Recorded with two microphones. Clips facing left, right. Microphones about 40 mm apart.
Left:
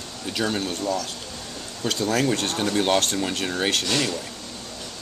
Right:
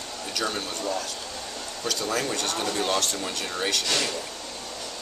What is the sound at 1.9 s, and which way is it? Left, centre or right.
Speech, left.